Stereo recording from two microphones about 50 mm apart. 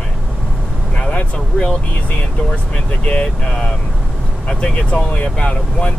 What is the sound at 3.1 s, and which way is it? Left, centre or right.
Speech, left.